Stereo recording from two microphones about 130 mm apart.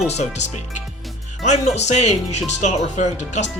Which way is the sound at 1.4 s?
60° left (ahead or behind).